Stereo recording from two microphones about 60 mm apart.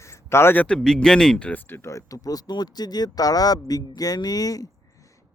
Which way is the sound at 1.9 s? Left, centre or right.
Left.